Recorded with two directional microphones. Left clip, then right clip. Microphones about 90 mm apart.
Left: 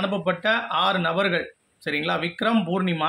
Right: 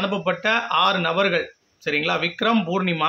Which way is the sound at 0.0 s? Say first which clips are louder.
Right 1 dB; 15° right (ahead or behind).